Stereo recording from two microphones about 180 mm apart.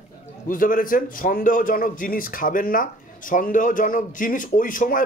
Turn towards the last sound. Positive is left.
turn(degrees=50)  # may be behind; listen again after turning